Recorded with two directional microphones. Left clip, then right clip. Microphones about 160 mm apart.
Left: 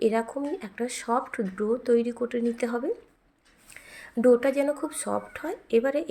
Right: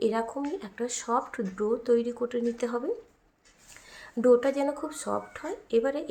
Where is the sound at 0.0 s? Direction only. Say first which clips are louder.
Left 3 dB; 10° left (ahead or behind).